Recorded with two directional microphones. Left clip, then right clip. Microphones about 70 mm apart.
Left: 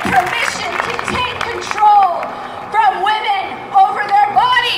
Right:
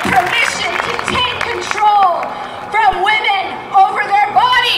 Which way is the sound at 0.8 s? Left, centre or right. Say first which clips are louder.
Right 2 dB; right.